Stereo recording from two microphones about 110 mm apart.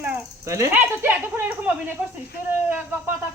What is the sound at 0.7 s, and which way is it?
Speech, 15° right (ahead or behind).